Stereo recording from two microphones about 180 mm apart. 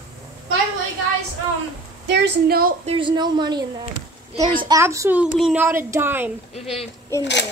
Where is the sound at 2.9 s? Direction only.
30° right (ahead or behind).